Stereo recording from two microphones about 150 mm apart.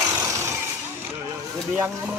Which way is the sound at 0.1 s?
20° right (ahead or behind).